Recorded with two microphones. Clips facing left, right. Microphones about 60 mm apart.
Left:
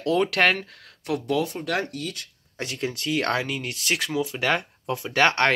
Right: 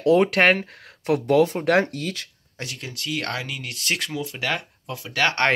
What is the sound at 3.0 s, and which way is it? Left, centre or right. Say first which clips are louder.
Speech: left 3 dB; left.